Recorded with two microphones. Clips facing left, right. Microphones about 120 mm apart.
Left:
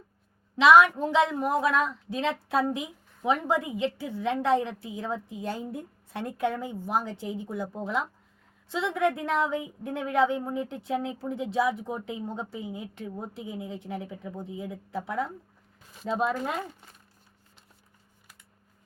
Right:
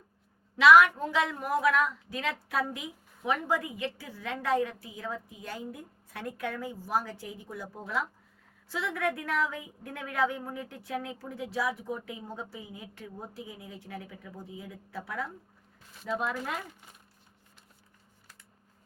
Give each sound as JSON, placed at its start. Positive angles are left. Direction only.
{"t": 0.5, "sound": "speech", "side_deg": 25}